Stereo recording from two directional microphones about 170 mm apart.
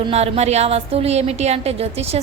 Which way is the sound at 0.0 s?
35° right (ahead or behind).